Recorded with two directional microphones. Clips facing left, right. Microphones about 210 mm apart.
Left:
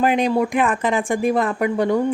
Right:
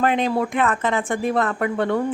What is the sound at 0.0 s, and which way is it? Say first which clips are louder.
A woman's voice: left 2 dB; 15° left (ahead or behind).